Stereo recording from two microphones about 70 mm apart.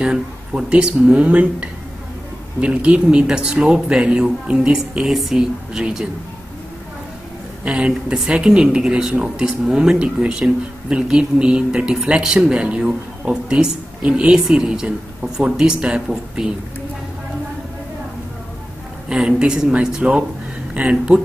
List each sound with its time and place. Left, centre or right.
0.0 s speech: centre
7.6 s speech: centre
19.0 s speech: centre